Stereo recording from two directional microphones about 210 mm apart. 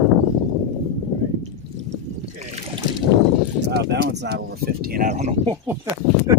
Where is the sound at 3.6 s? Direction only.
55° right (ahead or behind); by 5.3 s 35° right (ahead or behind).